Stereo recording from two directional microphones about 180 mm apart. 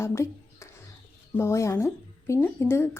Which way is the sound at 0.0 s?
15° left (ahead or behind).